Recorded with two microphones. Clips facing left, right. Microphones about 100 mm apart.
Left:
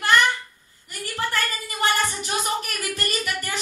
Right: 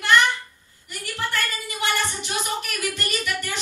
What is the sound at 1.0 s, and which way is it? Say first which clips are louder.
A woman's voice: left 1 dB; 45° left (ahead or behind).